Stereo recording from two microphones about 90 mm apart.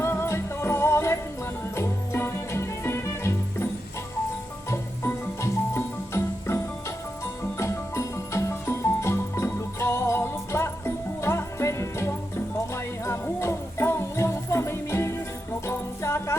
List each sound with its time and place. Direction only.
0.0 s music: 30° left (ahead or behind)
4.7 s music: 30° left (ahead or behind)
7.6 s music: 30° left (ahead or behind)